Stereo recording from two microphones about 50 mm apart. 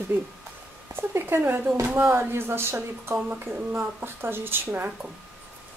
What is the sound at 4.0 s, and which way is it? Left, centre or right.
Speech, right.